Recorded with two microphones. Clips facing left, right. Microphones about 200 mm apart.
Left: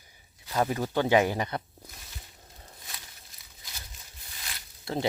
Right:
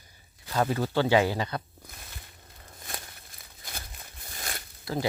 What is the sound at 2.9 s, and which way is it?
Crumpling, 55° right (ahead or behind).